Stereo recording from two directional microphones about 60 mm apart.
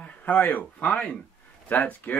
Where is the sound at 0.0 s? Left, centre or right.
Left.